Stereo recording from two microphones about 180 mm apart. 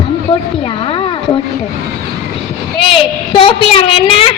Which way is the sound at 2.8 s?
30° left (ahead or behind).